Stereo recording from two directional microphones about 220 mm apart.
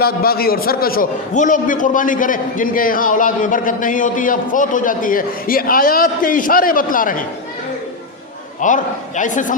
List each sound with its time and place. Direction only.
0.0 s a man's voice: 45° left (ahead or behind)
8.6 s a man's voice: 35° left (ahead or behind)